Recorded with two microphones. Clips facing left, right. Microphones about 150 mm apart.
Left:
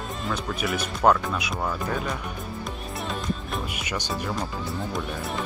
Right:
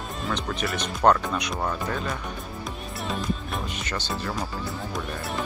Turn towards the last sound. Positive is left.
turn(degrees=0)  # may be behind; listen again after turning